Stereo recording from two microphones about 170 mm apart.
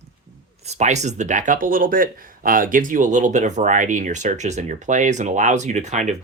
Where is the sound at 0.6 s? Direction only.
40° right (ahead or behind).